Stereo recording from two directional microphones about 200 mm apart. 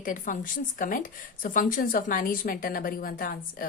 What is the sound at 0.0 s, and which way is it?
A woman's voice, 40° left (ahead or behind).